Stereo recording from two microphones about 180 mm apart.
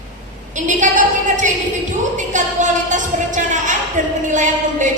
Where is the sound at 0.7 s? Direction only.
45° right (ahead or behind).